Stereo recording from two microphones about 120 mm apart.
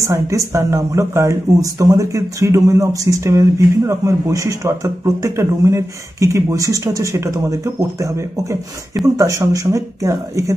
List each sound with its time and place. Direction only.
0.0 s speech: 25° right (ahead or behind)